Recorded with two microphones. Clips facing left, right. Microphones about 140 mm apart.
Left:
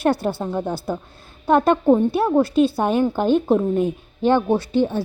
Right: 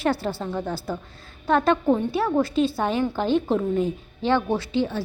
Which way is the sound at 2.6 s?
50° left (ahead or behind).